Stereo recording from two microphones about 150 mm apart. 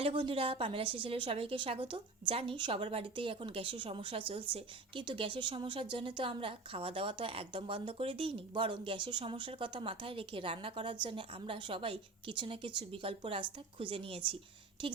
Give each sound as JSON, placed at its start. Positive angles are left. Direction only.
{"t": 0.0, "sound": "a woman's voice", "side_deg": -40}